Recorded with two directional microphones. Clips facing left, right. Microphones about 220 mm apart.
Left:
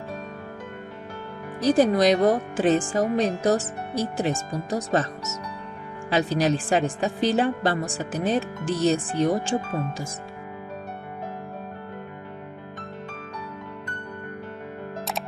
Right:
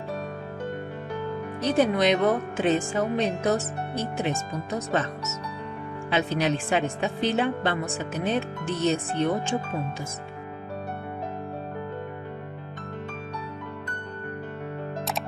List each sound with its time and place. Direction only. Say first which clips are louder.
1.6 s speech: left 4 dB; 35° left (ahead or behind)
6.0 s speech: left 3 dB; 40° left (ahead or behind)